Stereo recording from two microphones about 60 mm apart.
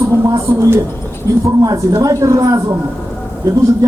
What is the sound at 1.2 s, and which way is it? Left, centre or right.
Speech, right.